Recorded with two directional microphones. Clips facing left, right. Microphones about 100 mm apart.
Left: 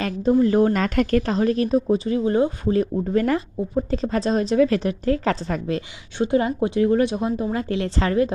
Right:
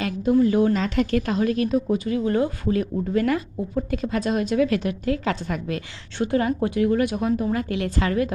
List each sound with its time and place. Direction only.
0.0 s speech: 35° left (ahead or behind); by 1.2 s 50° left (ahead or behind)
1.2 s speech: 35° left (ahead or behind)
6.1 s speech: 20° left (ahead or behind)